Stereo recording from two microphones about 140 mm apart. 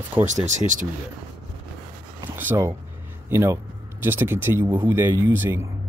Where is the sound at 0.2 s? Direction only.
60° right (ahead or behind).